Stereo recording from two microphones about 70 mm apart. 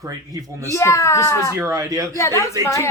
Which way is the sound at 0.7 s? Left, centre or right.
Left.